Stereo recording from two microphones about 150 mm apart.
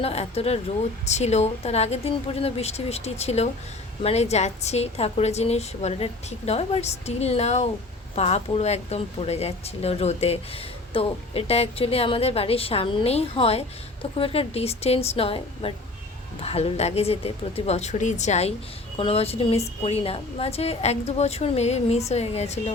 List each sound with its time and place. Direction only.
0.0 s speech: 40° left (ahead or behind)